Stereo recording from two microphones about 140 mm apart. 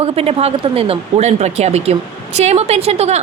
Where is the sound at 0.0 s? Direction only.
45° right (ahead or behind).